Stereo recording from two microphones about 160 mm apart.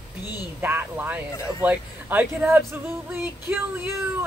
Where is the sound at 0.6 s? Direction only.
10° right (ahead or behind).